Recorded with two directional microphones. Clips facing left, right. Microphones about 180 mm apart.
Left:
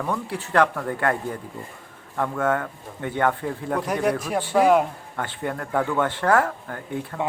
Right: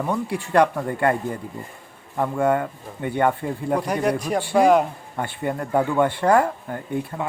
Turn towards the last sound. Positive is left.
turn(degrees=-15)  # may be behind; listen again after turning